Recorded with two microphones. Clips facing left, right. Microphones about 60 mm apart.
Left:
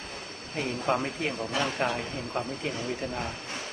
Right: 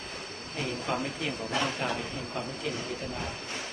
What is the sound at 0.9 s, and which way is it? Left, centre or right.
Speech, left.